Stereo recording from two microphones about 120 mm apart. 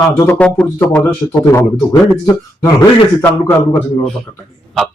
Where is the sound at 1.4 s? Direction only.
25° left (ahead or behind).